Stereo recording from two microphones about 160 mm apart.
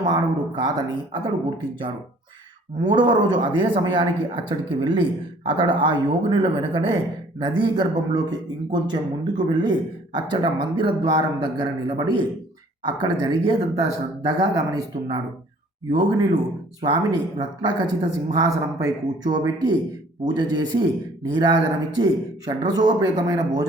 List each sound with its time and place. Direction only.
0.0 s speech: 25° right (ahead or behind)
16.8 s speech: 25° right (ahead or behind)